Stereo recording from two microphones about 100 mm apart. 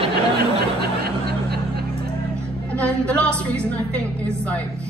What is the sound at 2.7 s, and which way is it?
A woman's voice, 15° left (ahead or behind).